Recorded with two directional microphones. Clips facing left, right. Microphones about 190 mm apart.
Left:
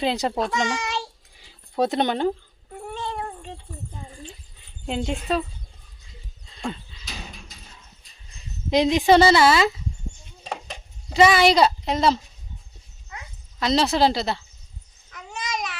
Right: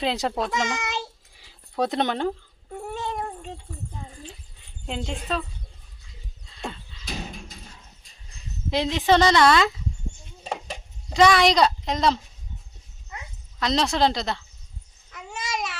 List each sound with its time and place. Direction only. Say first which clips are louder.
0.0 s a woman's voice: left 2 dB; centre (ahead or behind)
1.4 s a sound: left 3 dB; centre (ahead or behind)
2.9 s cat: even; 10° right (ahead or behind)
4.9 s a woman's voice: left 4 dB; 5° left (ahead or behind)
8.7 s speech: left 4 dB; 15° left (ahead or behind)
10.4 s a sound: right 1 dB; 10° right (ahead or behind)
11.1 s a woman's voice: left 1 dB; 5° left (ahead or behind)
13.6 s a woman's voice: left 2 dB; 5° left (ahead or behind)
15.1 s babbling: even; 5° right (ahead or behind)